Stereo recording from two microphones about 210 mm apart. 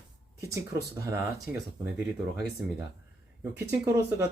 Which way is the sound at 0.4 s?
15° right (ahead or behind).